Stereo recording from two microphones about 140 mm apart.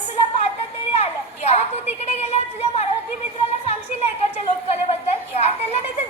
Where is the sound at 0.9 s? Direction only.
50° left (ahead or behind).